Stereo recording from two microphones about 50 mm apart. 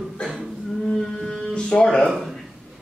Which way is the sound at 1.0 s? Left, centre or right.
Centre.